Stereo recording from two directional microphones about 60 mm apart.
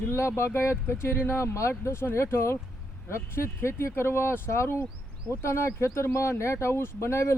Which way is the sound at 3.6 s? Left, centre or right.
Left.